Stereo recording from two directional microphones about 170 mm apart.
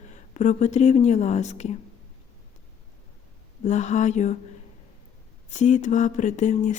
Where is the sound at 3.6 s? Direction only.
40° left (ahead or behind).